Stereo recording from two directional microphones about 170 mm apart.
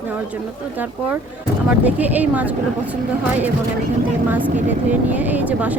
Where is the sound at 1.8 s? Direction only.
10° right (ahead or behind).